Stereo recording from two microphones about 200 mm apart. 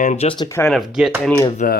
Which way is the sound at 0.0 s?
35° left (ahead or behind).